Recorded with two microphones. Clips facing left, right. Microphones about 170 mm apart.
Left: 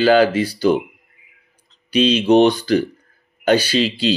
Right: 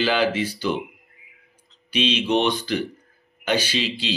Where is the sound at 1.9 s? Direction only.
40° left (ahead or behind).